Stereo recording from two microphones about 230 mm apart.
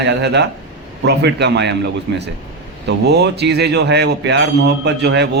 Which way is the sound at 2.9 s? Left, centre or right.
Right.